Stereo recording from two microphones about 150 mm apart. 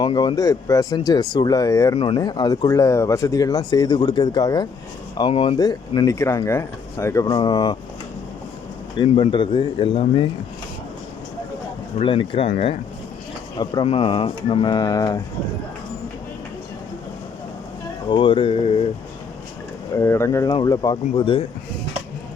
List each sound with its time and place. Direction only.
0.0 s speech: 30° left (ahead or behind)
5.3 s speech: 40° left (ahead or behind)
5.5 s speech: 25° left (ahead or behind)
9.0 s speech: 35° left (ahead or behind)
11.9 s speech: 35° left (ahead or behind)
13.8 s speech: 40° left (ahead or behind)
18.1 s speech: 30° left (ahead or behind)
20.0 s speech: 20° left (ahead or behind)